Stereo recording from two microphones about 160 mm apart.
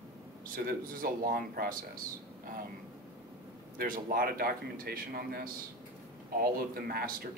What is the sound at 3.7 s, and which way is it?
A man's voice, 60° right (ahead or behind).